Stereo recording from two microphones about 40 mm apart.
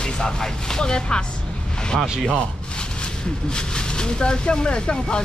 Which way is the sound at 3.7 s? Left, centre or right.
Left.